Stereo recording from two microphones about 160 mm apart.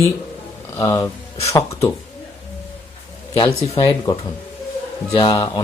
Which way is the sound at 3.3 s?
35° left (ahead or behind).